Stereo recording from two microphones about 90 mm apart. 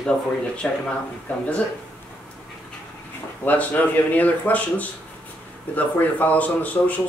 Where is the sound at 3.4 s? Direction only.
15° left (ahead or behind).